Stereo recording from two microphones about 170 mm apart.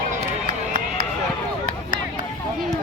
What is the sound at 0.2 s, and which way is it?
Run, 60° right (ahead or behind).